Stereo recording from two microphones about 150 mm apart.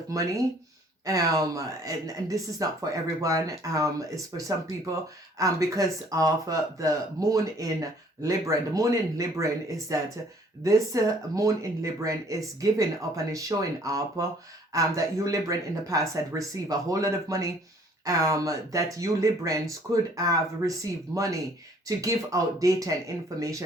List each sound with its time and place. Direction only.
0.1 s speech: 20° right (ahead or behind)
21.8 s speech: 20° right (ahead or behind)